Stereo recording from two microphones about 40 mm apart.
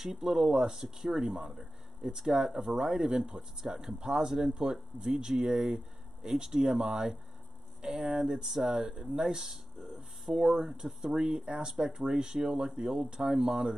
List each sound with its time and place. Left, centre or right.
0.0 s speech: centre
9.8 s a sound: right
10.2 s speech: centre
13.2 s speech: centre